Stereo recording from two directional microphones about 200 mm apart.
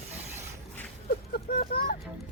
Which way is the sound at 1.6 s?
40° left (ahead or behind).